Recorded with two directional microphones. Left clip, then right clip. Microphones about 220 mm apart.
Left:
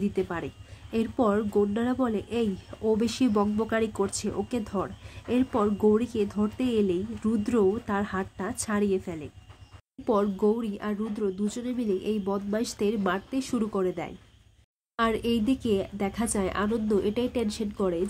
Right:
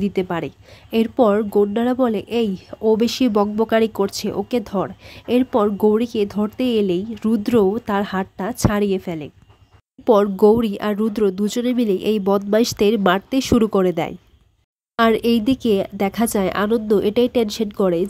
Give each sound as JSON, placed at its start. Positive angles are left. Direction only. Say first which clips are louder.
{"t": 0.0, "sound": "speech", "louder": "right 8 dB", "side_deg": -40}